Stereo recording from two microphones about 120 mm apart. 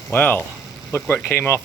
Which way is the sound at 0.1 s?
15° left (ahead or behind).